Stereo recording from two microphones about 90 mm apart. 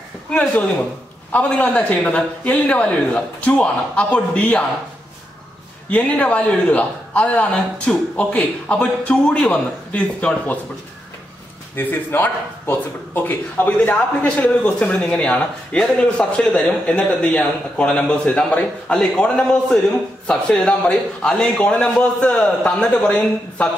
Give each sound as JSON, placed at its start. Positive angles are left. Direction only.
{"t": 0.3, "sound": "speech", "side_deg": 15}
{"t": 5.9, "sound": "speech", "side_deg": 15}
{"t": 11.7, "sound": "speech", "side_deg": 20}